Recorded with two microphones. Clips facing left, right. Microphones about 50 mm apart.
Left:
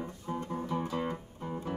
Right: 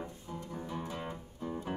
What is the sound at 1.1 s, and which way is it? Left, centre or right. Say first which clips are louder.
Music: left 1 dB; left.